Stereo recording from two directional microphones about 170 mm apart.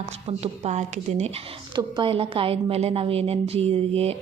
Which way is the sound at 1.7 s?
30° right (ahead or behind).